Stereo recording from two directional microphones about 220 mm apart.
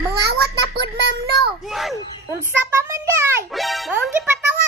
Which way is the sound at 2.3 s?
15° right (ahead or behind).